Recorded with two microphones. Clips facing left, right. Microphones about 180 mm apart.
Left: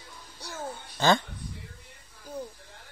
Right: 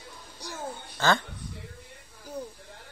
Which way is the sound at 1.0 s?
15° left (ahead or behind).